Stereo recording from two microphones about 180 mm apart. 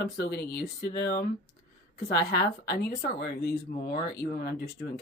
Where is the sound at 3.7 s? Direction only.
60° left (ahead or behind).